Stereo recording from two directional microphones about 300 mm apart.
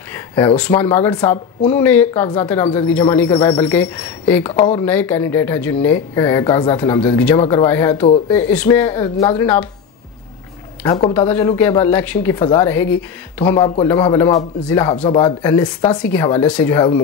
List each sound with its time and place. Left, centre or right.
0.6 s speech: centre
11.1 s speech: centre
13.4 s speech: centre